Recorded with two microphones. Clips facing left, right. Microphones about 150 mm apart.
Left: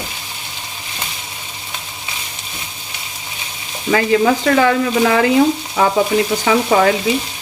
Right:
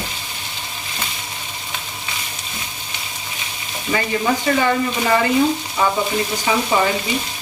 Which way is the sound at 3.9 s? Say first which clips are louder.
Left 6 dB; 75° left (ahead or behind).